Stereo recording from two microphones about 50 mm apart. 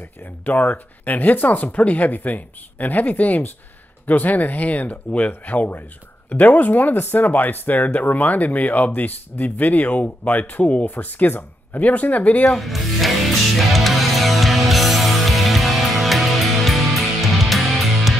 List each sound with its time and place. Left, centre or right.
0.5 s speech: left
10.6 s speech: left
11.0 s speech: left
12.4 s music: centre